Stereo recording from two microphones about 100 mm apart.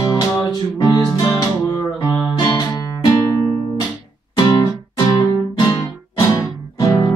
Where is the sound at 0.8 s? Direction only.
35° left (ahead or behind).